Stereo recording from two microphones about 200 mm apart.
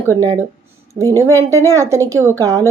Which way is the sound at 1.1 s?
15° right (ahead or behind).